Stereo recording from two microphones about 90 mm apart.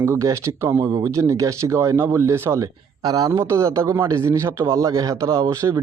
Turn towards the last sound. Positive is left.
turn(degrees=-35)  # may be behind; listen again after turning